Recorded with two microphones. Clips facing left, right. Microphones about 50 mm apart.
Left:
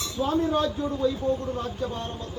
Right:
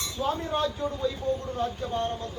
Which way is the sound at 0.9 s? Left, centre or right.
Left.